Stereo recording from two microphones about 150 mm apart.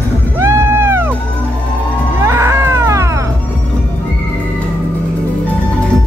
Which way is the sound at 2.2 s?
20° right (ahead or behind).